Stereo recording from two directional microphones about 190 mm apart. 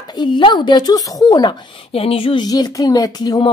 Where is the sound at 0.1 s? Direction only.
25° left (ahead or behind).